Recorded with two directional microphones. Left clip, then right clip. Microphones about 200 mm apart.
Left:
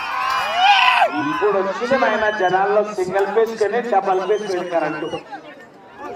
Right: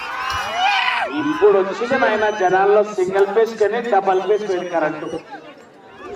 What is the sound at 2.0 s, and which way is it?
A man's voice, 30° right (ahead or behind).